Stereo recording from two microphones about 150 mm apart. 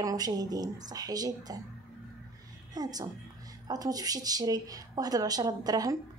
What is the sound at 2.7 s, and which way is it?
Speech, 25° right (ahead or behind).